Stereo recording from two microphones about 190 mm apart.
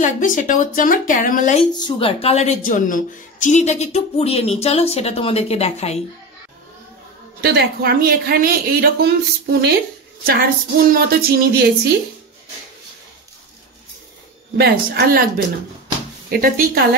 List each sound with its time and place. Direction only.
0.0 s speech: 45° left (ahead or behind)
1.7 s a woman's voice: 20° left (ahead or behind)
7.4 s speech: 55° right (ahead or behind)
10.9 s speech: 50° right (ahead or behind)
14.6 s speech: 55° right (ahead or behind)